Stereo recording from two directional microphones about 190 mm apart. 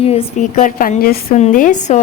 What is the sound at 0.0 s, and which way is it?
A woman's voice, 30° left (ahead or behind).